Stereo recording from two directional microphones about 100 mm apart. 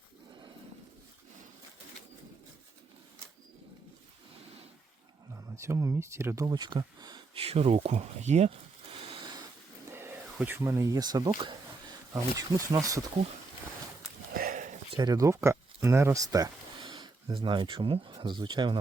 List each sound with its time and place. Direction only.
5.3 s speech: 30° right (ahead or behind)
6.5 s speech: 50° right (ahead or behind)
7.3 s speech: 85° right; by 9.3 s 60° right (ahead or behind)
9.9 s a sound: 25° right (ahead or behind)
10.3 s speech: 15° right (ahead or behind)
10.6 s speech: 30° right (ahead or behind)
14.9 s speech: 40° right (ahead or behind)
16.8 s a sound: 60° right (ahead or behind)
17.3 s speech: 55° right (ahead or behind)